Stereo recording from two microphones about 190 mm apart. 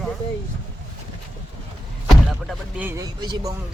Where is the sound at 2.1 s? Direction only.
Centre (ahead or behind).